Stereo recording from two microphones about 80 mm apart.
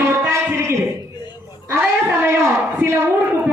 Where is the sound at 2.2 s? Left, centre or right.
Right.